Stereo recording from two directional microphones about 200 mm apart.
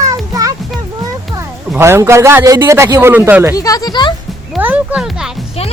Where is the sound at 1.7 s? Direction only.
10° right (ahead or behind).